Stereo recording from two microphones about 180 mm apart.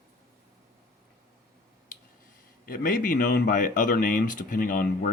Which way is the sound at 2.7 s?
50° left (ahead or behind).